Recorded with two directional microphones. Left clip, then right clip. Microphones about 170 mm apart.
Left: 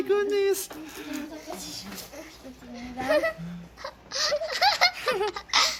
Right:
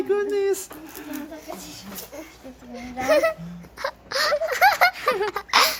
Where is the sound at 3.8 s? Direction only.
60° right (ahead or behind).